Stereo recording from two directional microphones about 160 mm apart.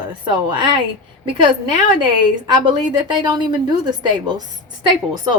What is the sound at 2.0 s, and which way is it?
A woman's voice, 30° right (ahead or behind).